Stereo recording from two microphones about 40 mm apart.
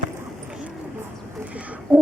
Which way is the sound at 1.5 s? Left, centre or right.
Right.